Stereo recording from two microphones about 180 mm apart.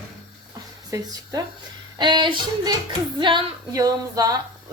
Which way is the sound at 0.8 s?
20° right (ahead or behind).